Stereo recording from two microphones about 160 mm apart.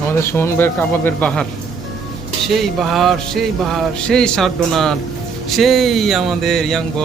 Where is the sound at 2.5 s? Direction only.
Centre (ahead or behind).